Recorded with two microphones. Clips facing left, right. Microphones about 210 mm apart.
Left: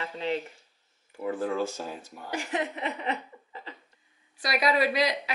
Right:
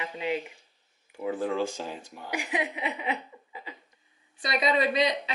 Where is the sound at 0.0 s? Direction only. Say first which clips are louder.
Even; 10° right (ahead or behind).